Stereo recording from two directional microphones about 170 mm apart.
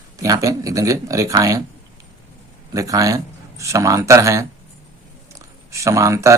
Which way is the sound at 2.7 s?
20° right (ahead or behind).